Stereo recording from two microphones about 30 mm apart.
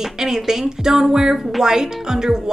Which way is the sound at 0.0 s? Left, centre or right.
Centre.